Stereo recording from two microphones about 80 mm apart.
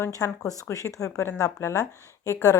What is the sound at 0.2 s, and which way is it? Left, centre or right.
A woman's voice, left.